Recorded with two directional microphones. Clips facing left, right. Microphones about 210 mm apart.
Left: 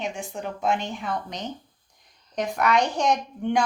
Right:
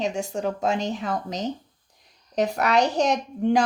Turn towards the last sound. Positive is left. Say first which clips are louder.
# right 2 dB
turn(degrees=-35)  # may be behind; listen again after turning